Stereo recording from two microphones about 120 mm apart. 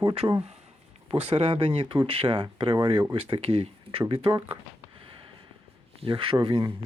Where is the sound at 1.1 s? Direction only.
55° right (ahead or behind).